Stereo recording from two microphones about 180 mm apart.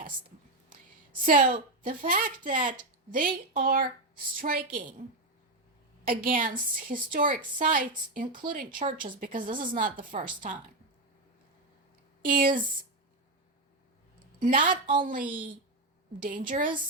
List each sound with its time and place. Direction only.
1.2 s a woman's voice: 50° right (ahead or behind)
6.1 s a woman's voice: 50° right (ahead or behind)
12.2 s a woman's voice: 50° right (ahead or behind)
14.3 s a woman's voice: 50° right (ahead or behind)
16.2 s a woman's voice: 50° right (ahead or behind)